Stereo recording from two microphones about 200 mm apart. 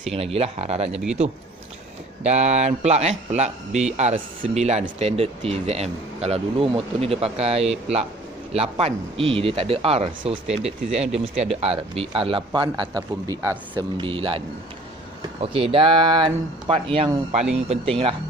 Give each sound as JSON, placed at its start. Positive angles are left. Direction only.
{"t": 0.0, "sound": "speech", "side_deg": -30}
{"t": 2.2, "sound": "speech", "side_deg": -35}
{"t": 15.4, "sound": "speech", "side_deg": -30}